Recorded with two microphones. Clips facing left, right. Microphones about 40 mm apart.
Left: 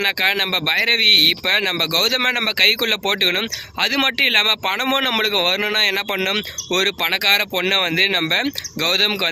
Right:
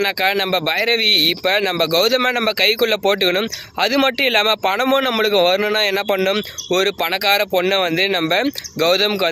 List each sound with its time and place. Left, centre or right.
0.0 s speech: left
4.9 s speech: left
6.7 s speech: left